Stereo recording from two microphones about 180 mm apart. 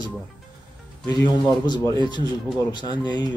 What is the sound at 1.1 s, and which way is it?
Speech, 20° left (ahead or behind).